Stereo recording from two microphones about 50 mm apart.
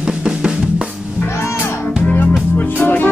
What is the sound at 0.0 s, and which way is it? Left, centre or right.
Drum, centre.